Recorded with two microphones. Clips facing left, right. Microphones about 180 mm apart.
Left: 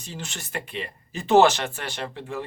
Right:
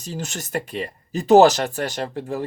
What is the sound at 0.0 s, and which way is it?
Speech, 40° right (ahead or behind).